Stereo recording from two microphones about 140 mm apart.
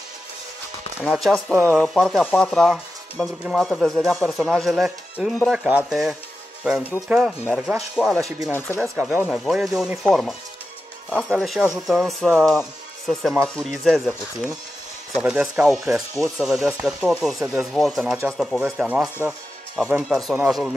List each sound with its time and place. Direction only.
1.1 s speech: centre (ahead or behind)
8.5 s speech: 15° left (ahead or behind)
9.0 s speech: 5° right (ahead or behind)
15.8 s speech: 25° right (ahead or behind)
16.3 s speech: centre (ahead or behind)